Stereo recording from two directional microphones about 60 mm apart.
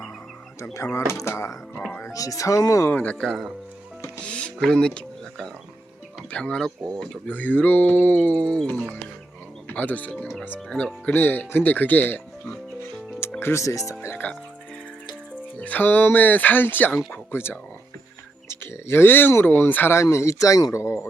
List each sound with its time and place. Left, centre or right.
0.6 s speech: left
2.1 s speech: left
2.9 s speech: left
3.2 s speech: centre
4.2 s music: centre
4.6 s speech: centre; by 8.4 s left
8.4 s speech: centre
10.7 s speech: centre
11.1 s speech: left
13.4 s speech: left
14.2 s speech: left
15.5 s speech: left
20.0 s speech: left